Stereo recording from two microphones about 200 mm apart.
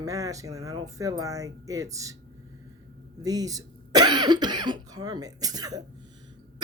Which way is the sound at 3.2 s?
20° right (ahead or behind).